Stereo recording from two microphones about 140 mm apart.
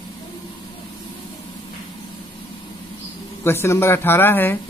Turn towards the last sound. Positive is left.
turn(degrees=15)  # may be behind; listen again after turning